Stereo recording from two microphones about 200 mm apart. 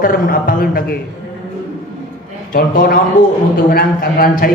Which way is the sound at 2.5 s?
45° left (ahead or behind).